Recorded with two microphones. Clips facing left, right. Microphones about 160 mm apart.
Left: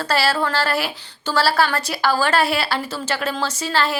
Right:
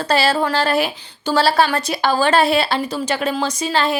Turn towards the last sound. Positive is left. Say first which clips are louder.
# right 3 dB
turn(degrees=-20)  # may be behind; listen again after turning